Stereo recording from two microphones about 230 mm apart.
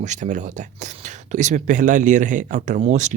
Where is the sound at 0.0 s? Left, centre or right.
Right.